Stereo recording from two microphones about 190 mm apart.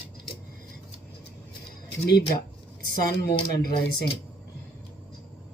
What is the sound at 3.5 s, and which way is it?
Speech, 55° left (ahead or behind).